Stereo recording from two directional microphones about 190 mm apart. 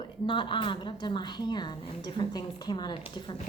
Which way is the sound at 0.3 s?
25° left (ahead or behind).